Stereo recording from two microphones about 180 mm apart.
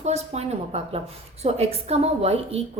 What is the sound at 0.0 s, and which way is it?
Speech, 35° right (ahead or behind).